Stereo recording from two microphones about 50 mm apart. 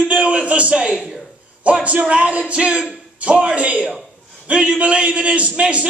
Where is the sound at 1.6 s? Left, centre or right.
Right.